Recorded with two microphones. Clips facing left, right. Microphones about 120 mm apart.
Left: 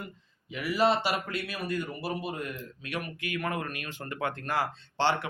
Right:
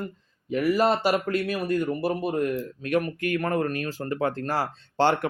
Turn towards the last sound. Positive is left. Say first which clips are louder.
# right 5 dB
turn(degrees=-40)  # may be behind; listen again after turning